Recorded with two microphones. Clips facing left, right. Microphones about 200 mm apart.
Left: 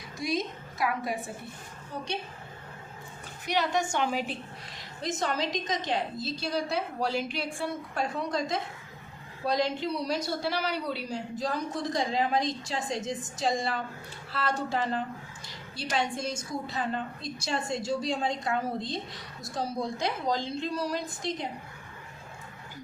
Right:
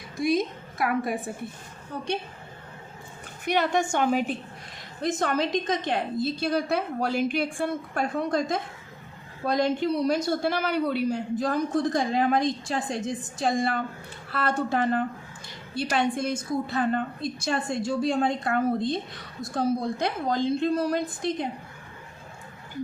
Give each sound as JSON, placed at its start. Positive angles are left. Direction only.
{"t": 0.2, "sound": "a woman's voice", "side_deg": -55}
{"t": 3.4, "sound": "a woman's voice", "side_deg": -55}